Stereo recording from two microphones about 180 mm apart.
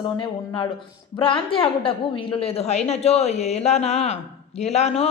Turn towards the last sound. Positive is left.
turn(degrees=35)  # may be behind; listen again after turning